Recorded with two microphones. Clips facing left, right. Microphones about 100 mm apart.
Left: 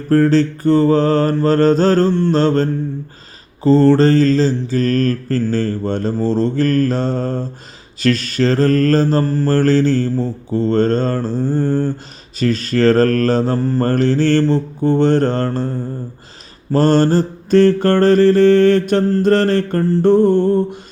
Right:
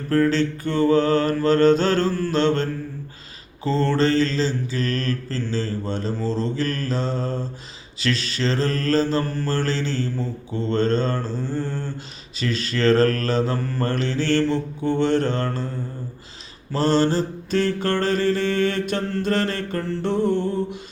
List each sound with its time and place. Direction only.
0.1 s mantra: 40° left (ahead or behind)
13.9 s mantra: 45° left (ahead or behind)
15.4 s mantra: 35° left (ahead or behind)
16.7 s mantra: 50° left (ahead or behind)
19.8 s mantra: 35° left (ahead or behind)
20.1 s mantra: 50° left (ahead or behind)